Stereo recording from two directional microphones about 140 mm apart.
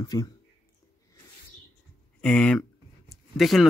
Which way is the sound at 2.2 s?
5° left (ahead or behind).